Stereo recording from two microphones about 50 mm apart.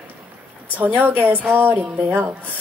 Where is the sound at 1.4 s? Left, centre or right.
Right.